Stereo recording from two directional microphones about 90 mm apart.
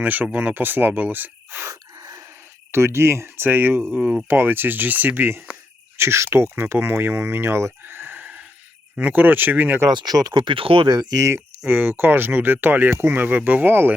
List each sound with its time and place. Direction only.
0.0 s speech: 20° right (ahead or behind)
1.7 s gasp: 40° right (ahead or behind)
2.7 s speech: 30° right (ahead or behind)
9.9 s speech: 50° right (ahead or behind)
10.4 s speech: 85° right
10.8 s speech: 50° right (ahead or behind)
11.7 s speech: 25° right (ahead or behind)